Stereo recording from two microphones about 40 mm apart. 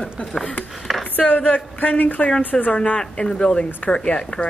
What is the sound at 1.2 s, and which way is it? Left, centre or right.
Speech, left.